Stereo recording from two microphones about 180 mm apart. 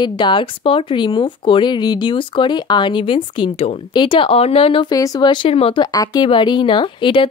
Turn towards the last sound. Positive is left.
turn(degrees=25)  # may be behind; listen again after turning